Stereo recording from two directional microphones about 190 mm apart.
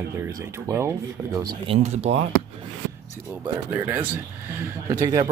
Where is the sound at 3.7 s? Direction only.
10° right (ahead or behind).